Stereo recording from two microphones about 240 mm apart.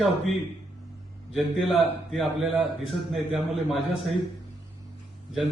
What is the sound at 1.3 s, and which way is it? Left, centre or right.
Speech, centre.